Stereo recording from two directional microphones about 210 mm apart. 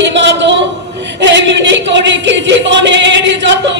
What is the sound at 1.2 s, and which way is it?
Music, 60° right (ahead or behind).